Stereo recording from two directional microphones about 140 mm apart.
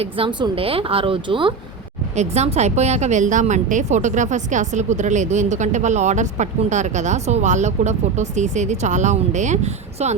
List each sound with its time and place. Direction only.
0.0 s speech: 35° right (ahead or behind)
2.1 s speech: 55° right (ahead or behind)